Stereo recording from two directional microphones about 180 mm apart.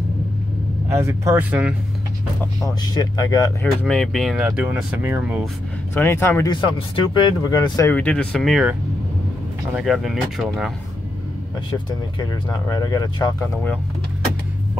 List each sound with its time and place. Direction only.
0.8 s speech: 15° right (ahead or behind)
2.6 s speech: 20° left (ahead or behind)
3.8 s speech: 5° left (ahead or behind)
5.9 s speech: 10° left (ahead or behind)
7.9 s speech: 5° left (ahead or behind)
11.7 s speech: 25° left (ahead or behind)